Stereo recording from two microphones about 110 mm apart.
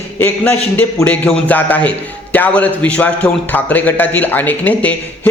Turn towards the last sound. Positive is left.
turn(degrees=15)  # may be behind; listen again after turning